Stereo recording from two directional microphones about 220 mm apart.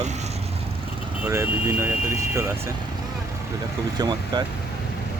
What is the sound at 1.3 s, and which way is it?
Speech, 10° right (ahead or behind).